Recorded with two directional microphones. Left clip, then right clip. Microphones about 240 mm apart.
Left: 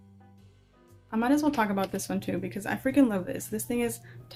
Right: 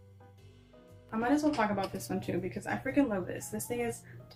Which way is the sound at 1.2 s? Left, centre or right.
Left.